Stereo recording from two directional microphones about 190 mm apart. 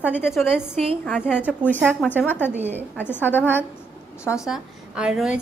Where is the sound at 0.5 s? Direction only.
5° right (ahead or behind).